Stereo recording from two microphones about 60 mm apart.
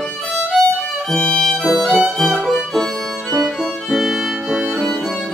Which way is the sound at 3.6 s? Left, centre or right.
Centre.